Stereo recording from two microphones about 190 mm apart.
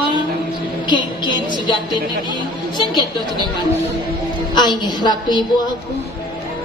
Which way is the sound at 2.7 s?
25° left (ahead or behind).